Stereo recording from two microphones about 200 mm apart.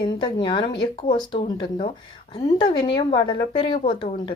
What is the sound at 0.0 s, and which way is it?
A woman's voice, 25° left (ahead or behind).